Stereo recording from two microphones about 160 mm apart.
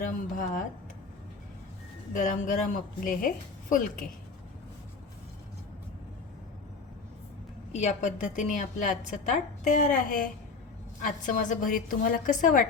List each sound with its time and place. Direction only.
0.0 s a woman's voice: 55° left (ahead or behind)
2.1 s a woman's voice: 50° left (ahead or behind)
7.7 s a woman's voice: 45° left (ahead or behind)